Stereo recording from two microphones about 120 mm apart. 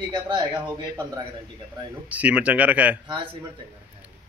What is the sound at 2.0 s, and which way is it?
Speech, 10° right (ahead or behind).